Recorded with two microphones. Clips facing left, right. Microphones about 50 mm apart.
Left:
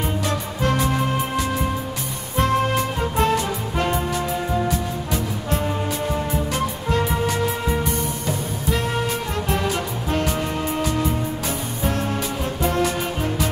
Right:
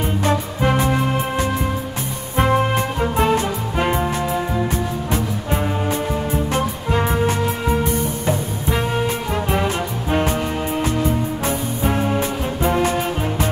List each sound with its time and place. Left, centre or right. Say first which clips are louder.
0.2 s music: right 4 dB; centre
2.3 s music: right 2 dB; centre
4.6 s music: right 2 dB; right
8.7 s music: right 3 dB; centre
11.8 s music: right 4 dB; centre